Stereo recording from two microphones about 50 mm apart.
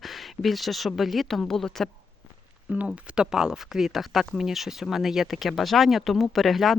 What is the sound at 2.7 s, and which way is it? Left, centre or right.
Speech, right.